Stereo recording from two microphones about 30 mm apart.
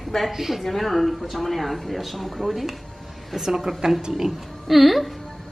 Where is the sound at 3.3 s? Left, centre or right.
Centre.